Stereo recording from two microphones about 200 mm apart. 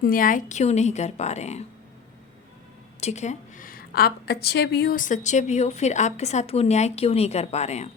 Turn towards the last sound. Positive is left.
turn(degrees=35)  # may be behind; listen again after turning